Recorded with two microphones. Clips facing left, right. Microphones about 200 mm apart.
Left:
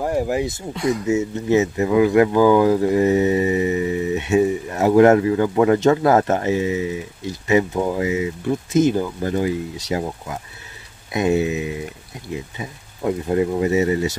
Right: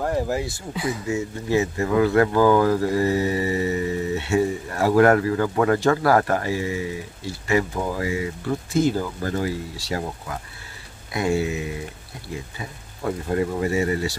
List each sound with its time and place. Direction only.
0.0 s speech: 15° left (ahead or behind)
0.7 s speech: 5° right (ahead or behind)
1.0 s speech: 20° left (ahead or behind)